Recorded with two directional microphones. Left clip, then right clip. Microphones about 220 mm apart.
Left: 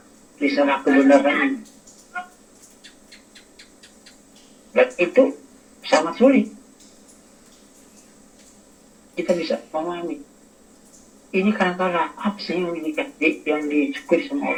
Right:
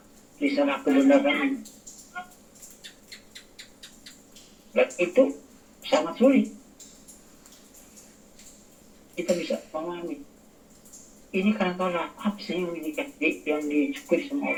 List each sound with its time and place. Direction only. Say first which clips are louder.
0.3 s speech: left 6 dB; 35° left (ahead or behind)
4.7 s speech: left 6 dB; 35° left (ahead or behind)
9.1 s speech: left 5 dB; 35° left (ahead or behind)
11.3 s speech: left 6 dB; 35° left (ahead or behind)